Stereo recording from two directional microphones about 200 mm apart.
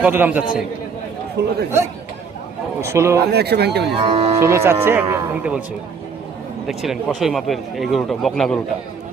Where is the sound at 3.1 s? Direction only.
55° right (ahead or behind).